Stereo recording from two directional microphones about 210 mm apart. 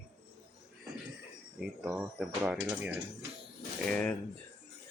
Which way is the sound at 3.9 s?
5° left (ahead or behind).